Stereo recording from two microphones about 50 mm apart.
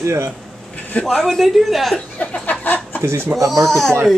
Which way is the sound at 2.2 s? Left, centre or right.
Left.